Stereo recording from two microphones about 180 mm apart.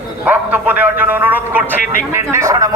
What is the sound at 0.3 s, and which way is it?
A man's voice, 10° right (ahead or behind).